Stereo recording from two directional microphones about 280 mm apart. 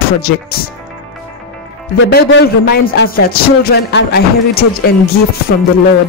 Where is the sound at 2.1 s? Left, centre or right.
Left.